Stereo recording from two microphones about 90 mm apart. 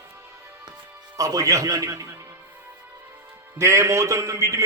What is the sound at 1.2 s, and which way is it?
Speech, 40° right (ahead or behind).